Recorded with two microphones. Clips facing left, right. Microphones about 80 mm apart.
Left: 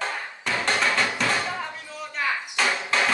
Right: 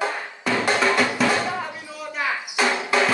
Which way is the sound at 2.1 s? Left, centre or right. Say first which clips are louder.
Right 1 dB; centre.